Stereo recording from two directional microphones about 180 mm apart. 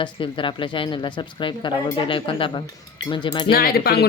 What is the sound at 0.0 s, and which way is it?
Speech, 30° left (ahead or behind).